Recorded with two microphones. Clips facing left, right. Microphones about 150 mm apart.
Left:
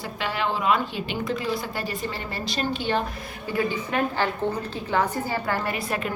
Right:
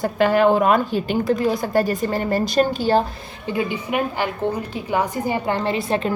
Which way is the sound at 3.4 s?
15° right (ahead or behind).